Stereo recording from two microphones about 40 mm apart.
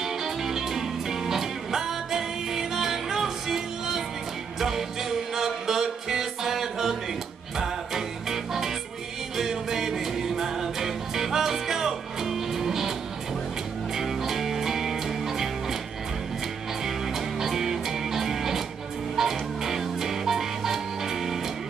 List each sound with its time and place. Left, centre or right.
0.0 s music: centre
13.9 s music: centre
16.8 s music: centre